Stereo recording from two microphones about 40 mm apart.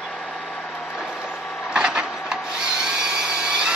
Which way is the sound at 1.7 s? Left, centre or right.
Right.